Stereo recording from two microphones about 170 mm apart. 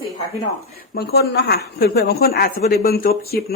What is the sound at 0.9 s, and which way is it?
A woman's voice, 70° left (ahead or behind).